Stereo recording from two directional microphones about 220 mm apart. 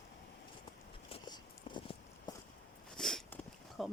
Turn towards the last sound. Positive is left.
turn(degrees=0)  # may be behind; listen again after turning